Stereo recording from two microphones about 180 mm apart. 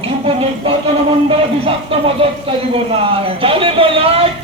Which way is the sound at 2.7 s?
30° right (ahead or behind).